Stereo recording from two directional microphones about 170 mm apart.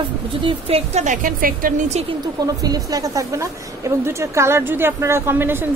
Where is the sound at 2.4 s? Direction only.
20° right (ahead or behind).